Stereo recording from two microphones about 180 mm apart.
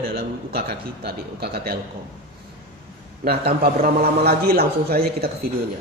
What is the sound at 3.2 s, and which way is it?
A man's voice, 60° right (ahead or behind).